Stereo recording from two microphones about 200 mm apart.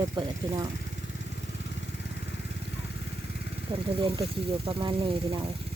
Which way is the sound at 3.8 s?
25° right (ahead or behind).